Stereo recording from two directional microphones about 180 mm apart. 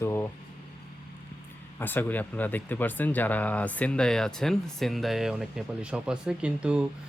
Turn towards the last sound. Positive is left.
turn(degrees=-5)  # may be behind; listen again after turning